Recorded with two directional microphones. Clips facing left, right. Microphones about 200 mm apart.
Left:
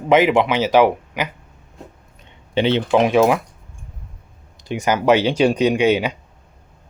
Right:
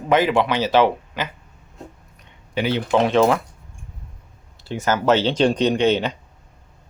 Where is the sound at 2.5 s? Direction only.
25° left (ahead or behind).